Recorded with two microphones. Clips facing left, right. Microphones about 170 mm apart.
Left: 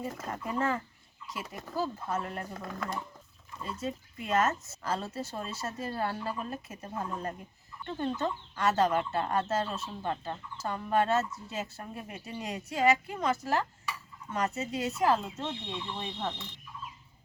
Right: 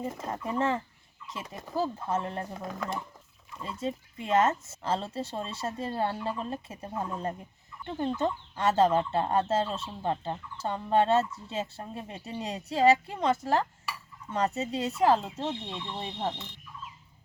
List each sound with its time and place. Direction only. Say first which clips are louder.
0.2 s speech: right 3 dB; 25° right (ahead or behind)